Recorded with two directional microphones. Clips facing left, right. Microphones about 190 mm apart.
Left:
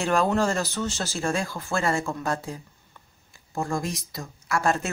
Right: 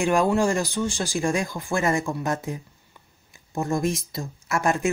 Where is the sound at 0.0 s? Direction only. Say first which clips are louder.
Right 2 dB; 15° right (ahead or behind).